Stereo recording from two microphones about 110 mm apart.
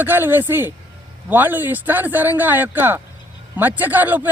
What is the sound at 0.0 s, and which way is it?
A woman's voice, 20° right (ahead or behind).